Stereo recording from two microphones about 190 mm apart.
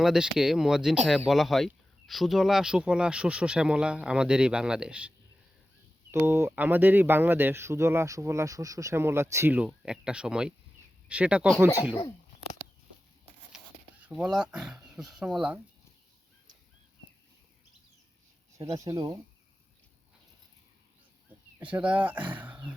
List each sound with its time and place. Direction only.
0.0 s speech: 5° right (ahead or behind)
14.0 s speech: 5° right (ahead or behind)
18.5 s speech: 15° right (ahead or behind)
21.7 s speech: 5° right (ahead or behind)